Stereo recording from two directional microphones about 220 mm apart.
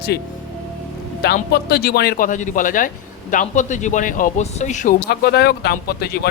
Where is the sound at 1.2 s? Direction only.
45° left (ahead or behind).